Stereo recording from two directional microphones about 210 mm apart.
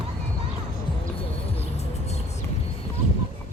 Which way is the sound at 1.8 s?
30° left (ahead or behind).